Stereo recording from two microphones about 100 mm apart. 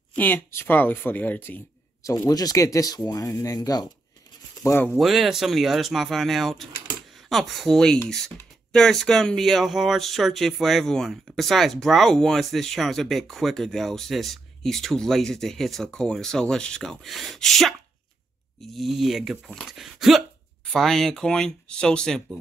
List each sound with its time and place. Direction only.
0.1 s speech: 20° left (ahead or behind)
2.2 s speech: 40° left (ahead or behind)
4.9 s speech: centre (ahead or behind)